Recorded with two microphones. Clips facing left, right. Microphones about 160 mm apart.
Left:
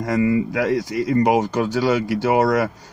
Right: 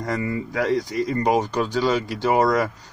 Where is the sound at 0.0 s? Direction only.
10° left (ahead or behind).